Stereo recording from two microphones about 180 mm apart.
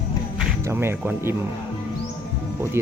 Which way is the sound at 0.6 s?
15° right (ahead or behind).